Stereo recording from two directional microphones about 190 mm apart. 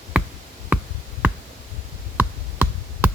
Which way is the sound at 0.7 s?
5° right (ahead or behind).